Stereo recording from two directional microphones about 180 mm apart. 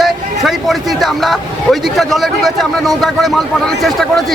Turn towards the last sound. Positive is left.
turn(degrees=0)  # may be behind; listen again after turning